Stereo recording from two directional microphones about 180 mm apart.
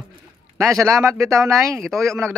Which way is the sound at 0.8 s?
15° right (ahead or behind).